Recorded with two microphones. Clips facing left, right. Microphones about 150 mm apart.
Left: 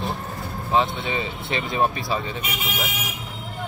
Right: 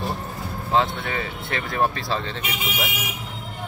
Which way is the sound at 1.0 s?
20° left (ahead or behind).